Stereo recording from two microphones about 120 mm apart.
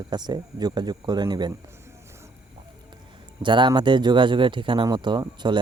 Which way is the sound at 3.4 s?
40° right (ahead or behind).